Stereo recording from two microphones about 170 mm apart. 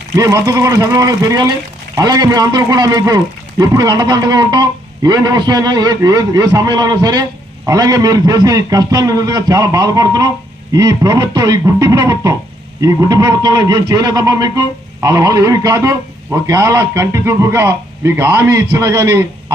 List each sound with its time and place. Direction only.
0.2 s speech: 20° right (ahead or behind)